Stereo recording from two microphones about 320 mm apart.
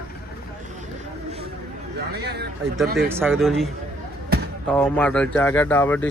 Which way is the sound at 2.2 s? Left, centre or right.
Right.